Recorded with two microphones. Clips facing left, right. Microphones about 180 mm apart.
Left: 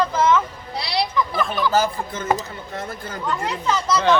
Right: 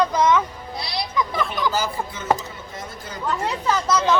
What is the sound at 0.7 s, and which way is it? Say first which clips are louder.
Music: left 6 dB; 70° left (ahead or behind).